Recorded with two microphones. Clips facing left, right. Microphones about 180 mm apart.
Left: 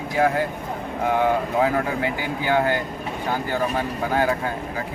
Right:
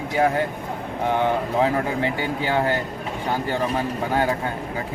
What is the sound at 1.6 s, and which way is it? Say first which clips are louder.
Speech: even; 30° right (ahead or behind).